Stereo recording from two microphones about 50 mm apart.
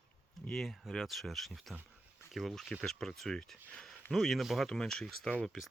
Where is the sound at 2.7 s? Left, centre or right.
Centre.